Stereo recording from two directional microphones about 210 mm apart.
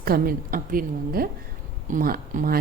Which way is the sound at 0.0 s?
45° right (ahead or behind).